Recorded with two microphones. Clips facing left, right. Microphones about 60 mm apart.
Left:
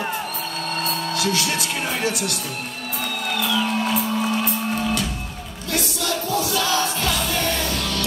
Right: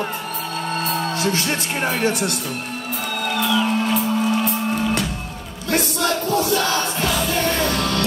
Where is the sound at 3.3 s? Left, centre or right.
Right.